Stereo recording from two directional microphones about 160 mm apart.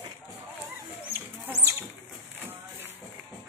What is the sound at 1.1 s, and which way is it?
Goat, 15° right (ahead or behind).